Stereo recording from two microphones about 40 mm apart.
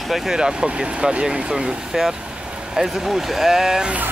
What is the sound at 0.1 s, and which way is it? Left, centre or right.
Speech, centre.